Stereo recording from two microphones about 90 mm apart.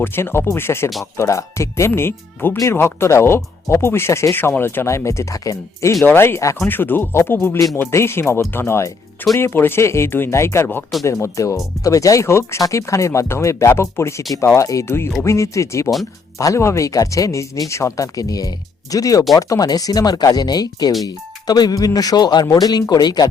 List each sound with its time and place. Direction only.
0.0 s speech: 25° left (ahead or behind)
6.1 s speech: 25° left (ahead or behind); by 23.3 s 50° left (ahead or behind)